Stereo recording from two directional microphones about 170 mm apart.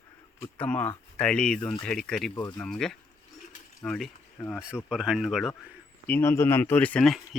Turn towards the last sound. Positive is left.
turn(degrees=5)  # may be behind; listen again after turning